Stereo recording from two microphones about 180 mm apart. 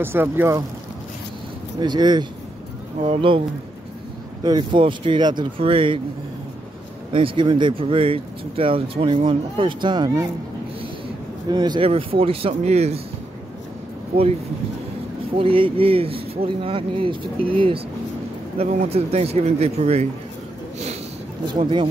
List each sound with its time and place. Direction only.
0.0 s speech: 10° right (ahead or behind)
1.8 s speech: 25° right (ahead or behind)
7.1 s speech: 30° right (ahead or behind)
11.4 s speech: 25° right (ahead or behind)
15.3 s speech: 30° right (ahead or behind)
21.5 s speech: 25° right (ahead or behind)